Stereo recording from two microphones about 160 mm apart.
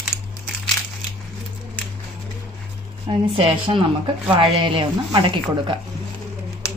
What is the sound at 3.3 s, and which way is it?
Speech, 35° right (ahead or behind).